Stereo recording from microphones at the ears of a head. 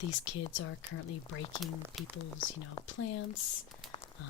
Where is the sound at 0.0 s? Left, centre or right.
Left.